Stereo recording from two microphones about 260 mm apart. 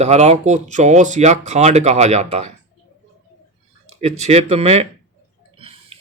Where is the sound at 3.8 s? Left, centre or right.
Right.